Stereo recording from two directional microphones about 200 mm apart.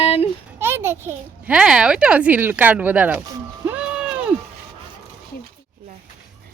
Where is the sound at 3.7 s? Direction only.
5° right (ahead or behind).